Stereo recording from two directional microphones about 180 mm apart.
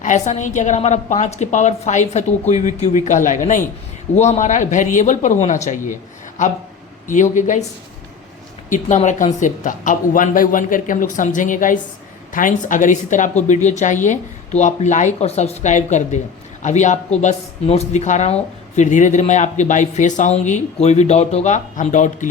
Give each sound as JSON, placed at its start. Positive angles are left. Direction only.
{"t": 0.0, "sound": "speech", "side_deg": 40}
{"t": 8.7, "sound": "speech", "side_deg": 45}